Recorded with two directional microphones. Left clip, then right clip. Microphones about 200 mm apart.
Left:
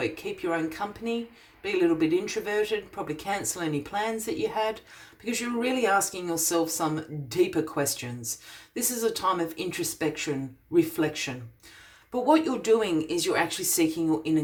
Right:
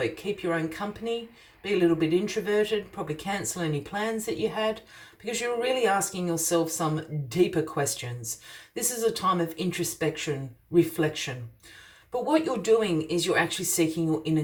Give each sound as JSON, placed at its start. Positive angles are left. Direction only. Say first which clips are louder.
{"t": 0.4, "sound": "speech", "louder": "left 2 dB", "side_deg": 30}
{"t": 12.3, "sound": "speech", "louder": "left 1 dB", "side_deg": 30}